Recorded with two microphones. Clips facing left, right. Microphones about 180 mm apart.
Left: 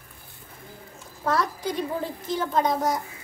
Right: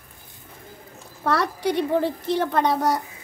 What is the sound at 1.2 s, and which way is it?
A woman's voice, 70° right (ahead or behind).